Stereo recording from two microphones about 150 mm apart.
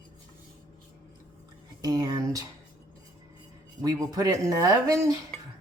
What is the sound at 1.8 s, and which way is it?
Speech, 25° right (ahead or behind).